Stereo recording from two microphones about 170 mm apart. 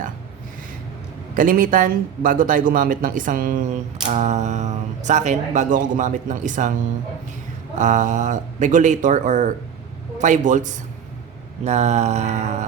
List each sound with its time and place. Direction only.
1.4 s speech: 55° right (ahead or behind)
7.8 s speech: 45° right (ahead or behind)
11.6 s a sound: 40° right (ahead or behind)